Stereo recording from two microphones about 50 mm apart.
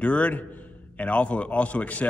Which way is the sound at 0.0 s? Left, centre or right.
Left.